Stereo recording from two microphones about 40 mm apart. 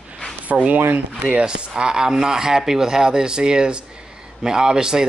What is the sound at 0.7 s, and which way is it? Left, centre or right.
Speech, right.